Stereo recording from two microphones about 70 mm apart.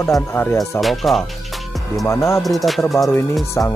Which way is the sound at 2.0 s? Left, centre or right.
Left.